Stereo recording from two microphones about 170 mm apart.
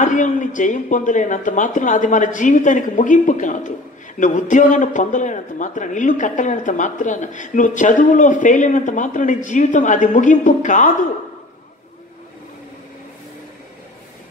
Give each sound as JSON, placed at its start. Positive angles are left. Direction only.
{"t": 0.0, "sound": "a man's voice", "side_deg": 50}